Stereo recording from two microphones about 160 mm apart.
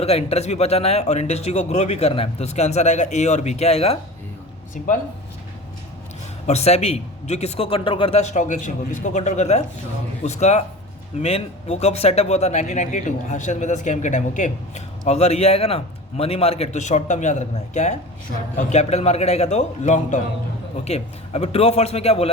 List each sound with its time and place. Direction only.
0.0 s speech: 40° left (ahead or behind)
6.5 s a man's voice: 40° left (ahead or behind)